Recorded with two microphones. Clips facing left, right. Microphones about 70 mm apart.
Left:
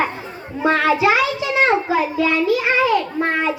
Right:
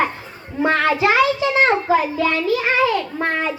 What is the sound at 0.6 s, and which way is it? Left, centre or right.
A child's voice, centre.